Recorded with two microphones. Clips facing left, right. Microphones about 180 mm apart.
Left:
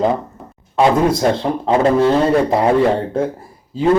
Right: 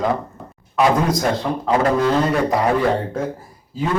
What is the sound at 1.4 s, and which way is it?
Speech, 25° left (ahead or behind).